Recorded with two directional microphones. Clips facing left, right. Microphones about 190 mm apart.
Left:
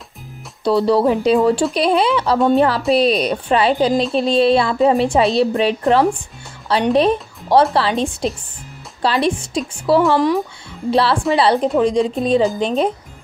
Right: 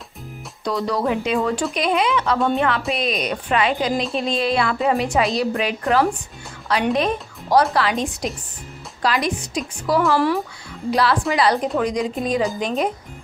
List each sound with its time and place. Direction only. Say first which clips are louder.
0.7 s a woman's voice: left 7 dB; 30° left (ahead or behind)
10.1 s speech: left 3 dB; 20° left (ahead or behind)
10.9 s a woman's voice: left 4 dB; 30° left (ahead or behind)